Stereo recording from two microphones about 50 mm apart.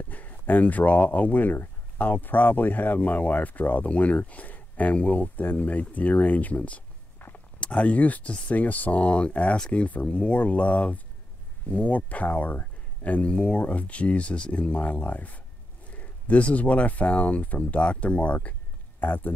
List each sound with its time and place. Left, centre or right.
0.1 s speech: left
13.3 s speech: left
18.9 s speech: left